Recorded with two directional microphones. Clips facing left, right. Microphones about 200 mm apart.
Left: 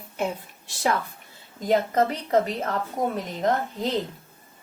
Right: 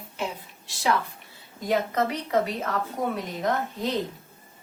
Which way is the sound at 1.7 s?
45° left (ahead or behind).